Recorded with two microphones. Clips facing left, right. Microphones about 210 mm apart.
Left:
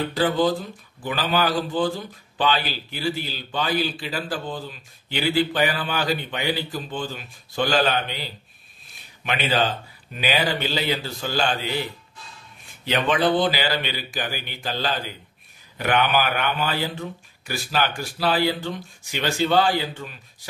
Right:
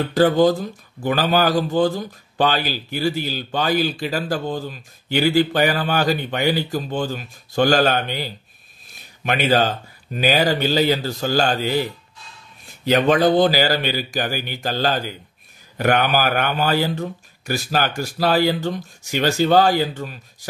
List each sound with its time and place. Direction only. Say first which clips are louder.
0.1 s a man's voice: right 8 dB; 45° right (ahead or behind)
12.8 s a man's voice: right 6 dB; 40° right (ahead or behind)